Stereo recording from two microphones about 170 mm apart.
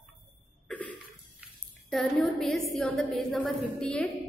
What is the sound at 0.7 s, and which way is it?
Cough, 10° left (ahead or behind).